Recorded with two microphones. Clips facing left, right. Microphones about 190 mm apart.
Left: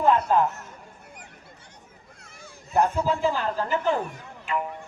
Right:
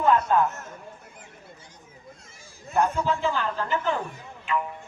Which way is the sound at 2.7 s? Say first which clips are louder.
Left 1 dB; 35° left (ahead or behind).